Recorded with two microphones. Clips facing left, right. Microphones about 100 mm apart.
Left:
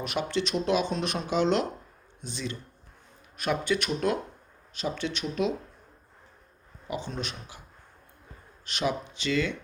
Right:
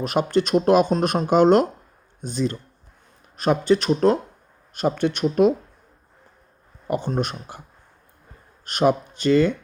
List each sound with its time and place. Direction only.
0.0 s speech: 45° right (ahead or behind)
4.7 s speech: 55° right (ahead or behind)
6.8 s speech: 50° right (ahead or behind)
8.6 s speech: 50° right (ahead or behind)